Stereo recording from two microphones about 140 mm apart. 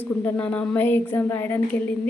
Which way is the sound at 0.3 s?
10° left (ahead or behind).